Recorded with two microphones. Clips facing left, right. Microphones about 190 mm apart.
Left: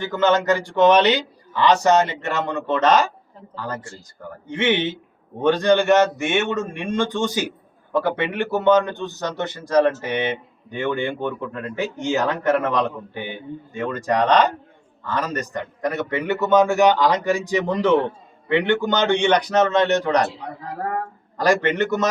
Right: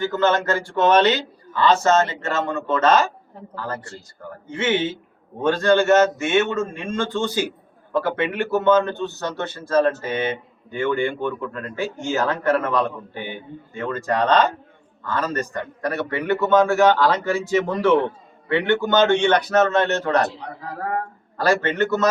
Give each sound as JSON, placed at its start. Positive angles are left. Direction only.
{"t": 0.1, "sound": "a man's voice", "side_deg": 15}
{"t": 21.3, "sound": "a man's voice", "side_deg": 15}